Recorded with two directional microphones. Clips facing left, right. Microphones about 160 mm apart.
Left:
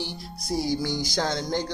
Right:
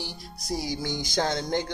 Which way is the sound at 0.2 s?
40° right (ahead or behind).